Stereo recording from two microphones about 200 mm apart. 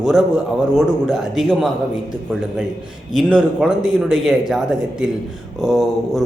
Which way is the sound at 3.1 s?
Centre (ahead or behind).